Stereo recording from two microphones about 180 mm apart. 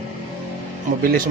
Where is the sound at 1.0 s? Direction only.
55° right (ahead or behind).